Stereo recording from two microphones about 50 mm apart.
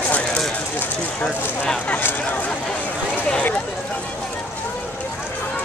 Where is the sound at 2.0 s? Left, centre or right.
Left.